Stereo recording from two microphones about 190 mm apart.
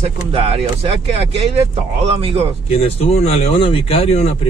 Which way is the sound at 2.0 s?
30° right (ahead or behind).